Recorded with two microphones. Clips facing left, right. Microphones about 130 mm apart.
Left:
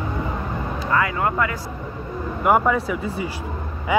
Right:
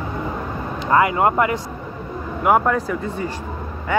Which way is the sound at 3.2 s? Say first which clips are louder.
Right 1 dB; 10° left (ahead or behind).